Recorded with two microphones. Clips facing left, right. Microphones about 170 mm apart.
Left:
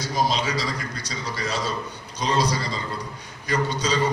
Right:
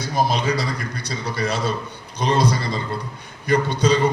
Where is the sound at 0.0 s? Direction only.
55° right (ahead or behind).